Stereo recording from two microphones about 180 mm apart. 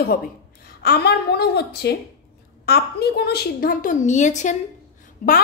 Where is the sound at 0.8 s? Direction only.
65° left (ahead or behind).